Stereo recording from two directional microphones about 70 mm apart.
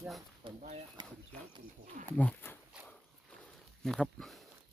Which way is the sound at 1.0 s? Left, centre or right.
Right.